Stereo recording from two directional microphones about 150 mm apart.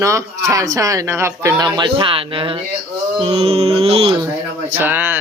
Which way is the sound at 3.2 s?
40° right (ahead or behind).